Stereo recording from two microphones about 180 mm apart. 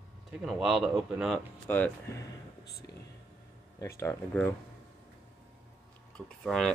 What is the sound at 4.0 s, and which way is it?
Speech, 15° left (ahead or behind).